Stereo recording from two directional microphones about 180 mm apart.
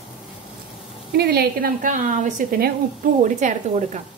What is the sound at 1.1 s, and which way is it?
A woman's voice, 60° right (ahead or behind).